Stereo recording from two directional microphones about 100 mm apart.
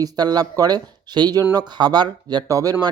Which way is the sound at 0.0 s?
40° right (ahead or behind).